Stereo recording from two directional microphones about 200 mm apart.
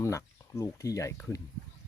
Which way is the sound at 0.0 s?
15° left (ahead or behind).